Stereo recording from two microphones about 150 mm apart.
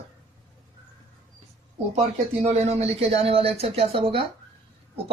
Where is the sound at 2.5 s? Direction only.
45° right (ahead or behind).